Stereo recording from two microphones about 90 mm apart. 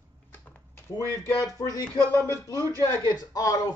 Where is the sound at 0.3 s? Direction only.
20° left (ahead or behind).